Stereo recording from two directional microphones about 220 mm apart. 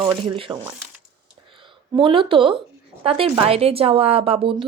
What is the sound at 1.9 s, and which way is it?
Speech, 25° right (ahead or behind).